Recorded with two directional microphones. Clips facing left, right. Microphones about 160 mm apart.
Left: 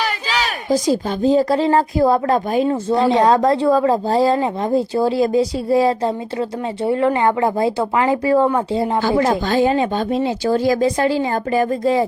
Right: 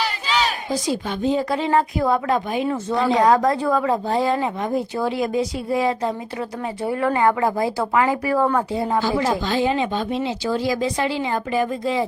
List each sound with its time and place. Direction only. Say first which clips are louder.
0.7 s speech: left 6 dB; 40° left (ahead or behind)
9.0 s speech: left 4 dB; 55° left (ahead or behind)